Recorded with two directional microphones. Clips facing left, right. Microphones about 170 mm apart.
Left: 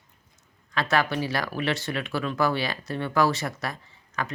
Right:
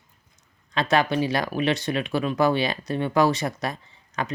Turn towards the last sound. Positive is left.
turn(degrees=-20)  # may be behind; listen again after turning